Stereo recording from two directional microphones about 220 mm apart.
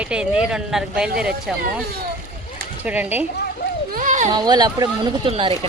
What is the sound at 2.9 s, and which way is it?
Speech, 10° right (ahead or behind).